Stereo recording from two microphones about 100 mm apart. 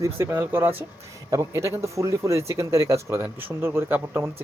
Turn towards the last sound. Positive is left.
turn(degrees=-25)  # may be behind; listen again after turning